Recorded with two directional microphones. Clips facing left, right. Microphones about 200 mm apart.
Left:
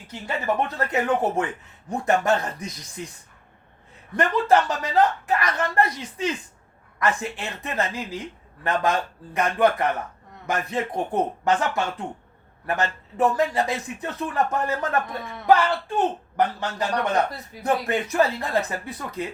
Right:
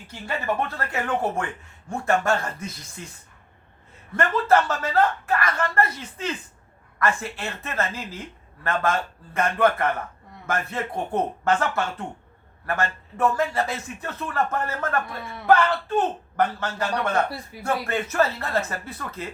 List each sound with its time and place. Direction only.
0.7 s speech: 20° left (ahead or behind)
4.1 s a man's voice: 15° left (ahead or behind)
17.2 s speech: 10° right (ahead or behind)
17.6 s a man's voice: 15° left (ahead or behind)